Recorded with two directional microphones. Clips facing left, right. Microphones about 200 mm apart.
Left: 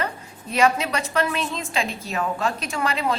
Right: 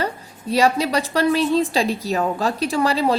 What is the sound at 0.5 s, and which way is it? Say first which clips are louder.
A woman's voice: right 3 dB; 35° right (ahead or behind).